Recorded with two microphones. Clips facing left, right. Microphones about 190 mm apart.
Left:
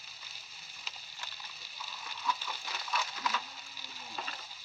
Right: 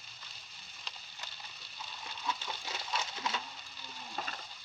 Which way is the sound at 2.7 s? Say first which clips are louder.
Left 2 dB; 25° right (ahead or behind).